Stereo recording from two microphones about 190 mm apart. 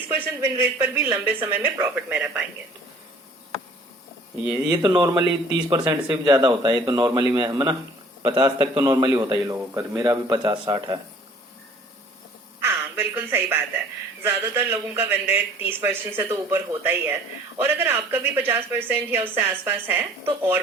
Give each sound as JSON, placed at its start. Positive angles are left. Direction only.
{"t": 0.3, "sound": "a man's voice", "side_deg": -10}
{"t": 4.4, "sound": "a man's voice", "side_deg": -20}
{"t": 12.6, "sound": "a man's voice", "side_deg": -10}